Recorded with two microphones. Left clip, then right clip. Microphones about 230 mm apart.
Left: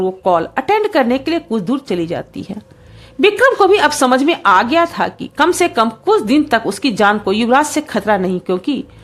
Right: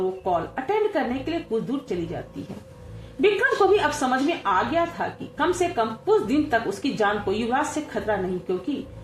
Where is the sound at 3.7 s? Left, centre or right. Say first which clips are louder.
Left 10 dB; left.